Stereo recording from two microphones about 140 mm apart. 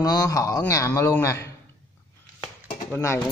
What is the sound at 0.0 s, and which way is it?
A man's voice, 25° left (ahead or behind).